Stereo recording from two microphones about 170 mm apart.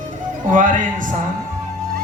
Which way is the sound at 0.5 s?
50° right (ahead or behind).